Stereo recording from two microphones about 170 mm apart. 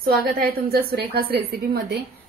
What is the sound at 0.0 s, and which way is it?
A woman's voice, 65° right (ahead or behind).